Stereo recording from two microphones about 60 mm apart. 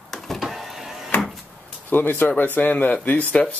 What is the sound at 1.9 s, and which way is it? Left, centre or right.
Speech, left.